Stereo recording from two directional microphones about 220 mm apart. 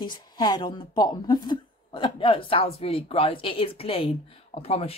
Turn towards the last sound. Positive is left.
turn(degrees=25)  # may be behind; listen again after turning